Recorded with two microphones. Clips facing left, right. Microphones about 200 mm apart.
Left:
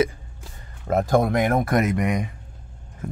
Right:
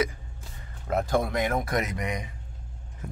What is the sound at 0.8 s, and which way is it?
Speech, 45° left (ahead or behind).